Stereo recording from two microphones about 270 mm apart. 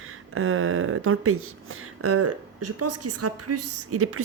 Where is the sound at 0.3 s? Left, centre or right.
Right.